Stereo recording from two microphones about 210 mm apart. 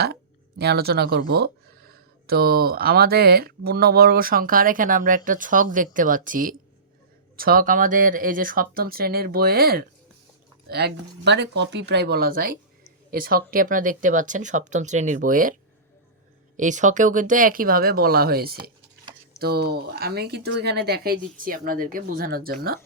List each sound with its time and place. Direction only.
0.6 s speech: 50° right (ahead or behind)
16.6 s speech: 35° right (ahead or behind)